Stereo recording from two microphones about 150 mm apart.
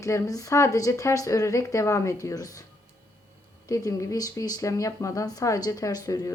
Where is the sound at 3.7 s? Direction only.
20° left (ahead or behind).